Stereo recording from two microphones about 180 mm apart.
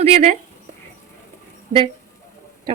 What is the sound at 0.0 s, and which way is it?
Speech, 35° right (ahead or behind).